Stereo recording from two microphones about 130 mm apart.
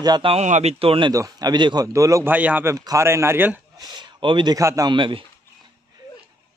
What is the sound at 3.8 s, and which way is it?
Speech, 35° right (ahead or behind).